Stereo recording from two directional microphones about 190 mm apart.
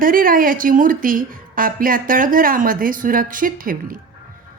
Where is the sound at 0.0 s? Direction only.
50° right (ahead or behind).